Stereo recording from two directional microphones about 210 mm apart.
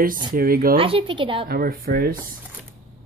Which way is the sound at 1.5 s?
45° right (ahead or behind).